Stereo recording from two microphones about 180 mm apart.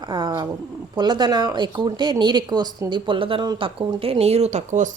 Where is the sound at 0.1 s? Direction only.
25° right (ahead or behind).